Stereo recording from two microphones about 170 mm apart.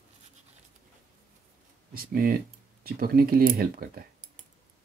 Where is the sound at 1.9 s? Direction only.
60° right (ahead or behind).